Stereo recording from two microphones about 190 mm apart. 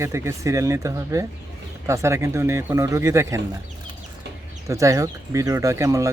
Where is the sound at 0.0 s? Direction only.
15° right (ahead or behind).